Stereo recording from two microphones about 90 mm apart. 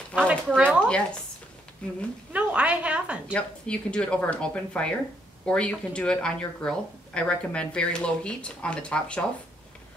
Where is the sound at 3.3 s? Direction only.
15° left (ahead or behind).